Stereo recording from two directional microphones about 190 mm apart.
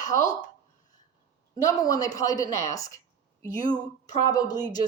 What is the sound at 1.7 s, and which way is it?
A woman's voice, 20° left (ahead or behind).